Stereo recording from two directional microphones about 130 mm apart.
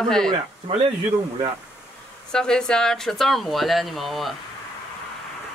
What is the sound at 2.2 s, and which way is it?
Speech, 5° left (ahead or behind).